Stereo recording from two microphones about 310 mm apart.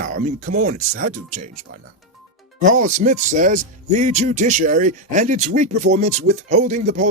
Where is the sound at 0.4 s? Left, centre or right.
Right.